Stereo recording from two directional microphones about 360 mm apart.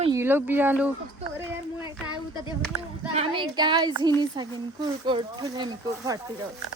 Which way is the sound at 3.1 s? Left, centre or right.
Centre.